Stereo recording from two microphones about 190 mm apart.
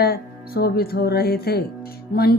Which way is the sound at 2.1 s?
55° left (ahead or behind).